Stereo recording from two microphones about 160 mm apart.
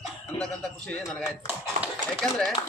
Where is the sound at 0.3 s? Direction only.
5° left (ahead or behind).